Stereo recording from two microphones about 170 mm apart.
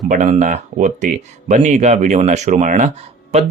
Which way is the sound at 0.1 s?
50° right (ahead or behind).